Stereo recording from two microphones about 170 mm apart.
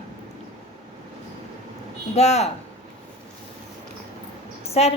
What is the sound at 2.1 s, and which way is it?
Speech, 40° left (ahead or behind).